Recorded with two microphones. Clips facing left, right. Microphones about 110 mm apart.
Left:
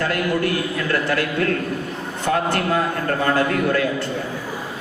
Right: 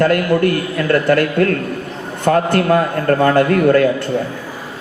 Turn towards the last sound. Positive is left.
turn(degrees=-50)  # may be behind; listen again after turning